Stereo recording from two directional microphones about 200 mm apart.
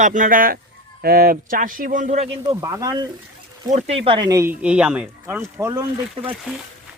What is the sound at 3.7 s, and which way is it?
Speech, 35° right (ahead or behind).